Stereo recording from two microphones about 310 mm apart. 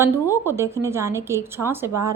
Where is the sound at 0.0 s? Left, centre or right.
Centre.